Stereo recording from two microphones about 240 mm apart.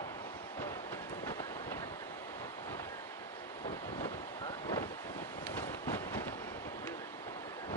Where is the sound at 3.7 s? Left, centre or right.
Centre.